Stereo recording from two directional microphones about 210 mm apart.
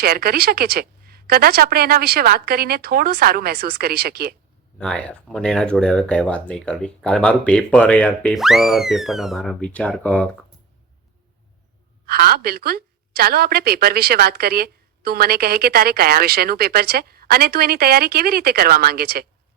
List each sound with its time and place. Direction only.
0.0 s a woman's voice: 45° right (ahead or behind)
4.8 s speech: 5° left (ahead or behind)
12.0 s a woman's voice: 45° right (ahead or behind)